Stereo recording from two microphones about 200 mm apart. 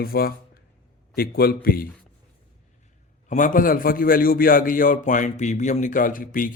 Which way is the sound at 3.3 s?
40° left (ahead or behind).